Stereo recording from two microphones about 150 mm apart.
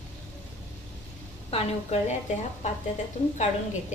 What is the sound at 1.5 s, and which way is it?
Speech, 45° left (ahead or behind).